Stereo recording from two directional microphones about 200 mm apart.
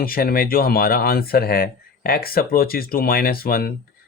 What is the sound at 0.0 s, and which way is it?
Speech, 45° left (ahead or behind).